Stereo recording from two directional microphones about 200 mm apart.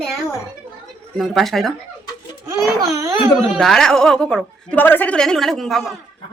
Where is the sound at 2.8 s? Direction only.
15° right (ahead or behind).